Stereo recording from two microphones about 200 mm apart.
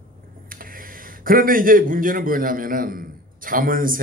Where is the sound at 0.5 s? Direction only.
45° right (ahead or behind).